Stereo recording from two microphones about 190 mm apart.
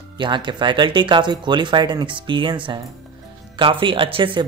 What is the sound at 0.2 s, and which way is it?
Speech, 25° right (ahead or behind).